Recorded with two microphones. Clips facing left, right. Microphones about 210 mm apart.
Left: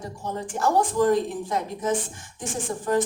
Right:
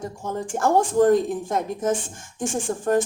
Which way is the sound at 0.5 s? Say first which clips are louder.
Right 3 dB; 55° right (ahead or behind).